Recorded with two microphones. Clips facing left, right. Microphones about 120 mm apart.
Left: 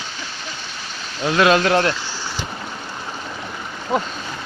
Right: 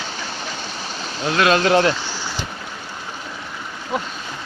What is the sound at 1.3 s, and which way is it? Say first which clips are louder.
Speech: left 2 dB; 20° left (ahead or behind).